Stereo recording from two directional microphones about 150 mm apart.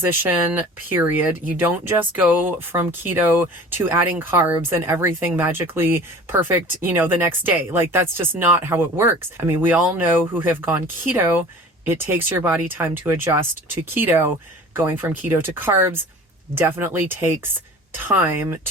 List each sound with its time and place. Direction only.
0.0 s speech: 15° right (ahead or behind)